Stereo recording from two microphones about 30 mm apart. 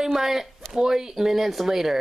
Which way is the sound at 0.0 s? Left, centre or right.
Centre.